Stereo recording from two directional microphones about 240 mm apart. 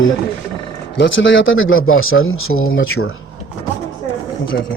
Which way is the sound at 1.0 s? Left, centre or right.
Left.